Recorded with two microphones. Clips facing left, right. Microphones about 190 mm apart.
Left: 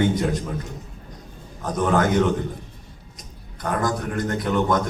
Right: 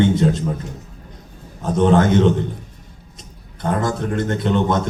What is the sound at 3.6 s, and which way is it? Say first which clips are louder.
A man's voice: right 3 dB; 25° right (ahead or behind).